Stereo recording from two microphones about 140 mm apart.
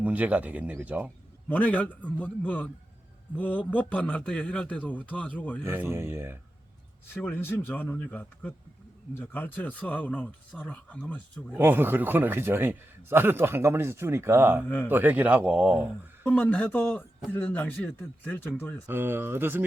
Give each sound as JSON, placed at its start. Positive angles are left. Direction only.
{"t": 0.0, "sound": "a man's voice", "side_deg": -10}
{"t": 1.5, "sound": "a man's voice", "side_deg": 10}
{"t": 5.6, "sound": "a man's voice", "side_deg": -15}
{"t": 7.1, "sound": "a man's voice", "side_deg": 15}
{"t": 11.5, "sound": "a man's voice", "side_deg": -15}
{"t": 16.2, "sound": "a man's voice", "side_deg": 10}
{"t": 18.9, "sound": "a man's voice", "side_deg": -15}